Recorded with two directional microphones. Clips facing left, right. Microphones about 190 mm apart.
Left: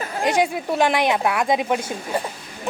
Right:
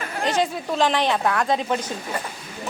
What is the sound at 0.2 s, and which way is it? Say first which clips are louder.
A woman's voice: left 3 dB; 15° left (ahead or behind).